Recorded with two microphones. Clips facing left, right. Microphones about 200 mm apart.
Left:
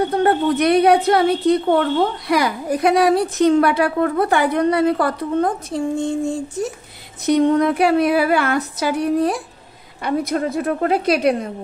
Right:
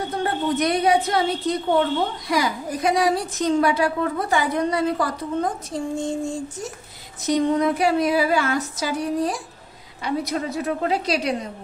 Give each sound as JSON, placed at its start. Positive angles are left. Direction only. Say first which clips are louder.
{"t": 0.1, "sound": "a woman's voice", "louder": "left 7 dB", "side_deg": 60}
{"t": 7.2, "sound": "a woman's voice", "louder": "left 5 dB", "side_deg": 60}